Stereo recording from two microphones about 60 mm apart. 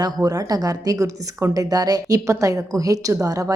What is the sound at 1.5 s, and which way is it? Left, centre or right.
A woman's voice, right.